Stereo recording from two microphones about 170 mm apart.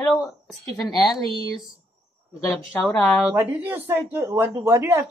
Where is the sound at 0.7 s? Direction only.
20° left (ahead or behind).